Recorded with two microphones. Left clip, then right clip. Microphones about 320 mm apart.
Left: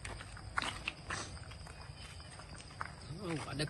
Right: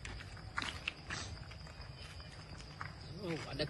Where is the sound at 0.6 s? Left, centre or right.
Left.